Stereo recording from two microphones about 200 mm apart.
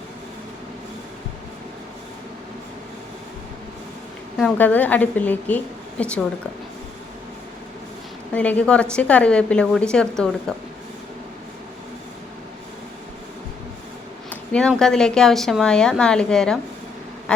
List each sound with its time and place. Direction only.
4.4 s a woman's voice: 5° left (ahead or behind)
8.3 s a woman's voice: 5° left (ahead or behind)
14.3 s a sound: 5° left (ahead or behind)
14.7 s a woman's voice: 5° left (ahead or behind)
17.3 s quack: 5° left (ahead or behind)